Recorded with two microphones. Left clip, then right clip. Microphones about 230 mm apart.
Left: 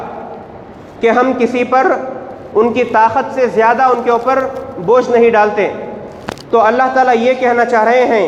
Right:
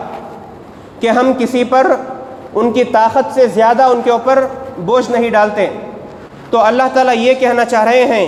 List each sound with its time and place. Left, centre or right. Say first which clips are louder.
1.0 s a man's voice: left 1 dB; right